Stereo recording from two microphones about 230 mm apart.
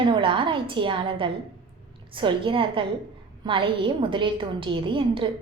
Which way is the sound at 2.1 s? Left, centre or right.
Right.